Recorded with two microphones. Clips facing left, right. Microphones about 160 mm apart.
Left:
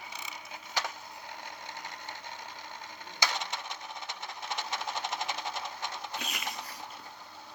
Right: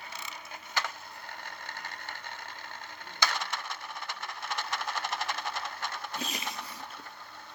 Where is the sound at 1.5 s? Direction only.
15° left (ahead or behind).